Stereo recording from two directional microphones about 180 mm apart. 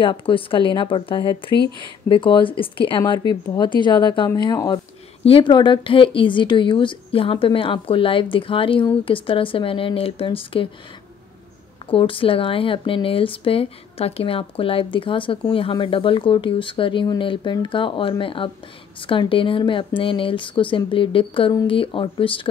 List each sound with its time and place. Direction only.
0.0 s speech: 30° left (ahead or behind)
11.9 s speech: 30° left (ahead or behind)